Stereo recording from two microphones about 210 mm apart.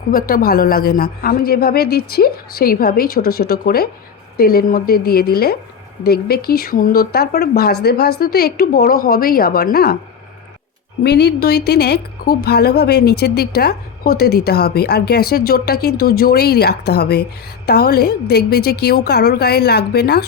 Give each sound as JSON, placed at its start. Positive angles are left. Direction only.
{"t": 0.1, "sound": "a woman's voice", "side_deg": 45}
{"t": 11.0, "sound": "a woman's voice", "side_deg": 50}